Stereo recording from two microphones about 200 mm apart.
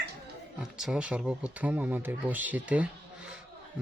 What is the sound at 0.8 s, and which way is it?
A man's voice, 5° right (ahead or behind).